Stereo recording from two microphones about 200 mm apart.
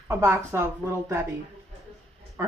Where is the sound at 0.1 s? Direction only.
15° right (ahead or behind).